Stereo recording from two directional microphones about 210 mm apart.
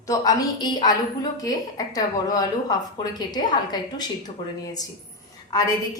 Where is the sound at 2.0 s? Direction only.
20° left (ahead or behind).